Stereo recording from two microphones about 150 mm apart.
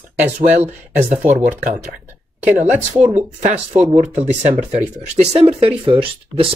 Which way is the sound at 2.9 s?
55° right (ahead or behind).